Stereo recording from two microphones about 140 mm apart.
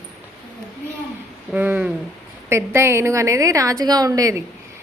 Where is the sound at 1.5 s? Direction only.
10° right (ahead or behind).